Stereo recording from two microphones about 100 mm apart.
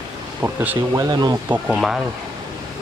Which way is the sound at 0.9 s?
40° right (ahead or behind).